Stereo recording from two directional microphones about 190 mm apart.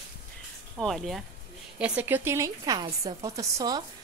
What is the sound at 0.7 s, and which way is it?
A woman's voice, centre (ahead or behind).